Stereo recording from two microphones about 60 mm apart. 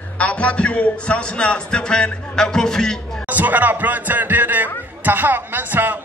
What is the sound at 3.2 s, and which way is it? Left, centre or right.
A man's voice, right.